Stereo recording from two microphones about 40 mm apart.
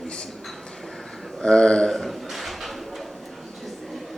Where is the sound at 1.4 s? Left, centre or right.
Left.